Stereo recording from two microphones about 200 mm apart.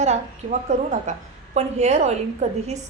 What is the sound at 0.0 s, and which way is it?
A woman's voice, 35° right (ahead or behind).